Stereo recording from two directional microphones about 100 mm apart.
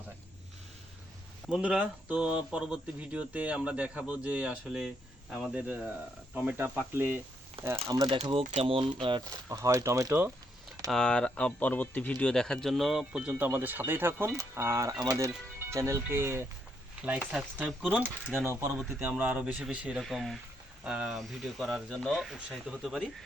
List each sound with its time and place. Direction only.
1.5 s speech: 10° right (ahead or behind)
7.6 s speech: 65° right (ahead or behind)
8.2 s speech: 80° right; by 9.2 s 55° right (ahead or behind)
9.5 s speech: 30° right (ahead or behind)
10.8 s speech: 5° left (ahead or behind); by 16.5 s 25° right (ahead or behind)
17.8 s speech: 15° right (ahead or behind)
20.0 s speech: centre (ahead or behind)